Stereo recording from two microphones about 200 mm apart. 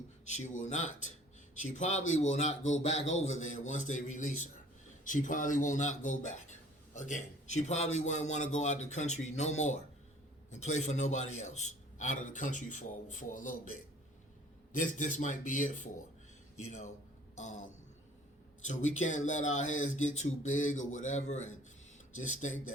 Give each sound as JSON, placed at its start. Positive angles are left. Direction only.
{"t": 0.3, "sound": "a man's voice", "side_deg": 35}
{"t": 14.8, "sound": "a man's voice", "side_deg": 40}
{"t": 17.3, "sound": "a sound", "side_deg": 35}
{"t": 18.6, "sound": "a man's voice", "side_deg": 40}